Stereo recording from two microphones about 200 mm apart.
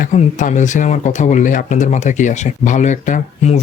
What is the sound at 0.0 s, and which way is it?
Speech, 35° left (ahead or behind).